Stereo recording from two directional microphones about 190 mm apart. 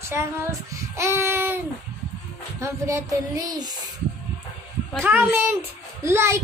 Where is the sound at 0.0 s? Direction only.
15° right (ahead or behind).